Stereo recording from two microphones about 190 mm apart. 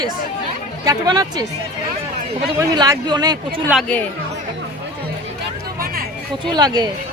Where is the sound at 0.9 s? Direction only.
20° right (ahead or behind).